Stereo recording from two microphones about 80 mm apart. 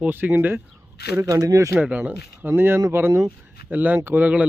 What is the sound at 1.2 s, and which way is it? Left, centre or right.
Speech, right.